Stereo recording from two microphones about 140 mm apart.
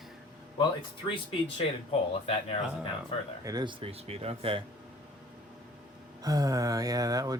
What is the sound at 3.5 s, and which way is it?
Mantra, 30° right (ahead or behind).